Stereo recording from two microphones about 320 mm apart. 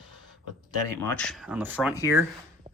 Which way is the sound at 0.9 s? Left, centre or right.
Centre.